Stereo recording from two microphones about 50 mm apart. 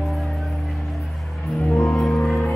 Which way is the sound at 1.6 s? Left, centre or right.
Left.